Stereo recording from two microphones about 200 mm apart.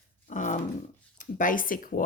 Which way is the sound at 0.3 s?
40° left (ahead or behind).